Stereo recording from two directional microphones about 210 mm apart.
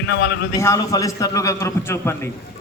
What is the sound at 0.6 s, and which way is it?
A man's voice, 15° left (ahead or behind).